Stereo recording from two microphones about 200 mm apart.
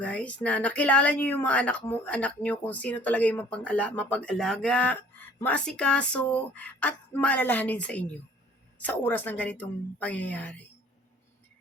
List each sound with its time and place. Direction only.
0.0 s a woman's voice: 5° left (ahead or behind)